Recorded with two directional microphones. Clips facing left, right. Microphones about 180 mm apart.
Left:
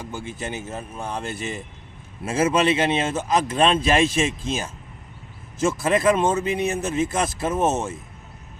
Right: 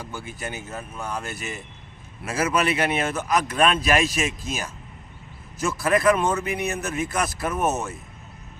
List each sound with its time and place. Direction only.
0.0 s speech: 25° left (ahead or behind)
5.8 s speech: 25° left (ahead or behind)